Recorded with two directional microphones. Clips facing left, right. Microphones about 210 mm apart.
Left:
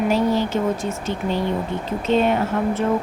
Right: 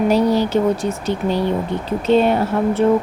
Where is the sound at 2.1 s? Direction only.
35° right (ahead or behind).